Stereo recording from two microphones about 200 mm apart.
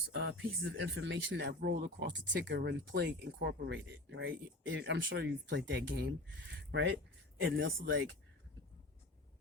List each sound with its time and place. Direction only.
0.1 s speech: 65° right (ahead or behind)